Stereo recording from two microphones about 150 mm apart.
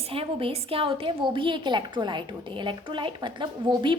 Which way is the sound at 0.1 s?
40° right (ahead or behind).